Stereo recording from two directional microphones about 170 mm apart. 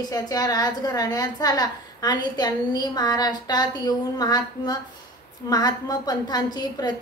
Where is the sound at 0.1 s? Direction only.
20° left (ahead or behind).